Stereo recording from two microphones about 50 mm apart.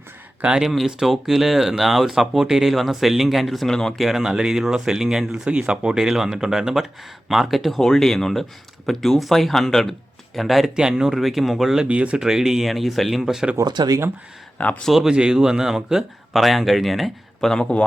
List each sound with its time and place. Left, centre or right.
0.6 s speech: centre
3.9 s speech: centre
7.8 s speech: centre
10.8 s speech: centre
11.8 s speech: right
12.1 s speech: centre
14.6 s speech: left
15.0 s speech: centre
17.5 s speech: centre